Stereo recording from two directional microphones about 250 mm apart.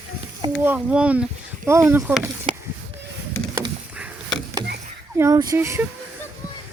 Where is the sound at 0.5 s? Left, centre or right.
Centre.